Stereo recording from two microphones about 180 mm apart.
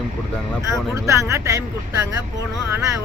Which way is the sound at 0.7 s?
15° right (ahead or behind).